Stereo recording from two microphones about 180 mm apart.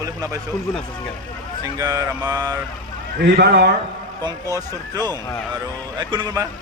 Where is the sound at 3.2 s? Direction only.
70° right (ahead or behind).